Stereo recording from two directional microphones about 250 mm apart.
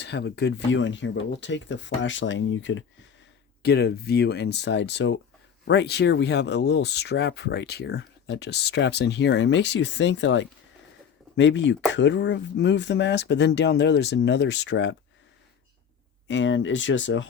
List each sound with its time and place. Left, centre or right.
0.0 s speech: left
16.2 s speech: left